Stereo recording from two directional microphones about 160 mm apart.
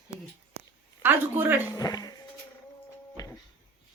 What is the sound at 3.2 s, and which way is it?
Music, 25° left (ahead or behind).